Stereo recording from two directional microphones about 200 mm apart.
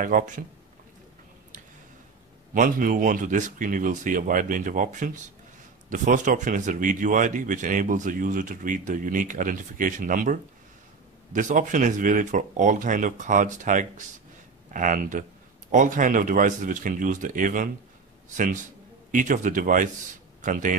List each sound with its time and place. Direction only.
0.0 s speech: 45° right (ahead or behind)
2.5 s speech: 40° right (ahead or behind)